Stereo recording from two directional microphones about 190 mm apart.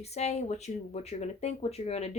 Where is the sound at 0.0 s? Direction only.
35° left (ahead or behind).